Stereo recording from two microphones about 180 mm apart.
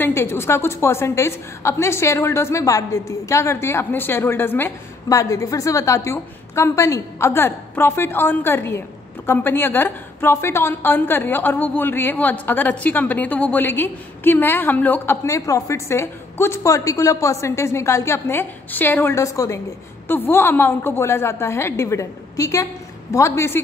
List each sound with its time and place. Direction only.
0.0 s a woman's voice: 15° left (ahead or behind)